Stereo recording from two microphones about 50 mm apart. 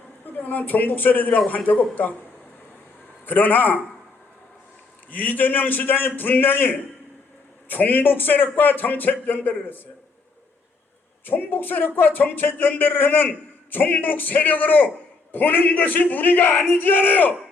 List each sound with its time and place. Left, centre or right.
0.3 s a man's voice: left
3.2 s a man's voice: left
5.1 s a man's voice: left
11.3 s a man's voice: left